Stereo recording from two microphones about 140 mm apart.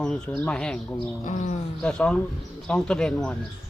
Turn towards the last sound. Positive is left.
turn(degrees=5)  # may be behind; listen again after turning